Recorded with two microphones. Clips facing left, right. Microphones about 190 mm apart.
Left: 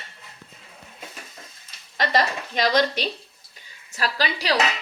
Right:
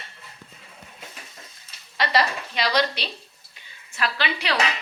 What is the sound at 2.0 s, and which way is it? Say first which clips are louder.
A woman's voice: even; 45° left (ahead or behind).